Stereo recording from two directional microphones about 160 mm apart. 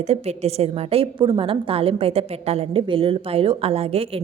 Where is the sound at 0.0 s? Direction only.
40° right (ahead or behind).